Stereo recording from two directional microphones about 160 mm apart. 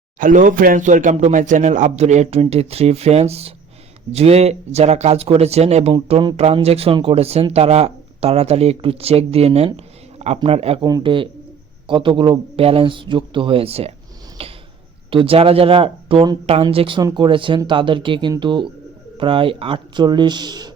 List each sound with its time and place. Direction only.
0.2 s speech: 55° right (ahead or behind); by 10.8 s 40° right (ahead or behind)
10.8 s speech: 30° right (ahead or behind)
14.4 s a sound: 40° right (ahead or behind)
15.1 s speech: 35° right (ahead or behind)